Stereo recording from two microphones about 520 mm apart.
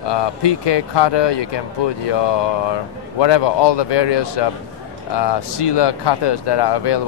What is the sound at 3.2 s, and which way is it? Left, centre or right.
Speech, left.